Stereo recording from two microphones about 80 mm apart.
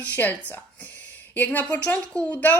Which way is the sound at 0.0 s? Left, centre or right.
Left.